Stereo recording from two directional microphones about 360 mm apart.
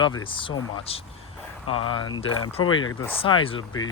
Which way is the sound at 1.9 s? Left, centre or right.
Centre.